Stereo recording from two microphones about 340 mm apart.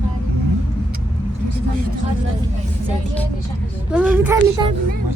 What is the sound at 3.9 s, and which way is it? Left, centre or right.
Speech, centre.